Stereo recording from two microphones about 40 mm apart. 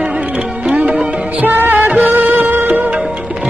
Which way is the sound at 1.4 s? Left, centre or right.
Right.